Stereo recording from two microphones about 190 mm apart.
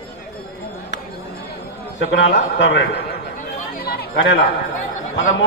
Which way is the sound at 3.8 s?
55° left (ahead or behind).